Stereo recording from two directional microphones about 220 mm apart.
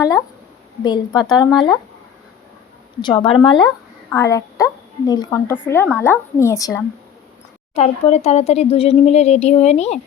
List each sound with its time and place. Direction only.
0.0 s a woman's voice: 15° left (ahead or behind)
3.0 s a woman's voice: 20° left (ahead or behind)
7.8 s speech: 30° left (ahead or behind)